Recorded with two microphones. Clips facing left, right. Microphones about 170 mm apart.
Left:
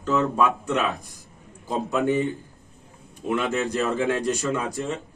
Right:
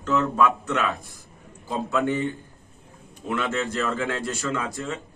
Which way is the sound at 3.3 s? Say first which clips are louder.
Left 2 dB; 15° left (ahead or behind).